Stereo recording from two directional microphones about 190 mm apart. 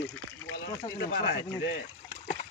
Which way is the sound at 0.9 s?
65° left (ahead or behind).